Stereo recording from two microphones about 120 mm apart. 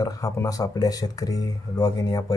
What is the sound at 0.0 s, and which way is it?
Speech, 30° left (ahead or behind).